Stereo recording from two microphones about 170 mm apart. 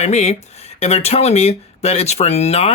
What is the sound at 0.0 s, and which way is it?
Speech, 40° left (ahead or behind).